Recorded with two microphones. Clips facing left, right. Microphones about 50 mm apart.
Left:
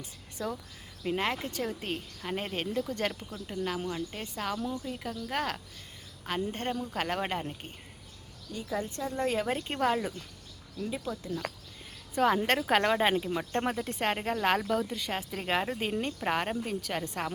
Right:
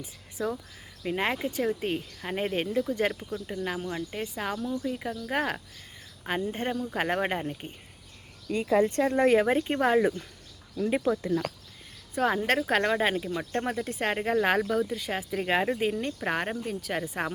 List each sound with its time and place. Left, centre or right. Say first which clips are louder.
0.0 s speech: right 4 dB; centre
8.4 s speech: right 11 dB; right
9.5 s speech: right 5 dB; centre
10.8 s speech: right 9 dB; right
12.1 s speech: right 1 dB; centre
16.0 s speech: right 1 dB; centre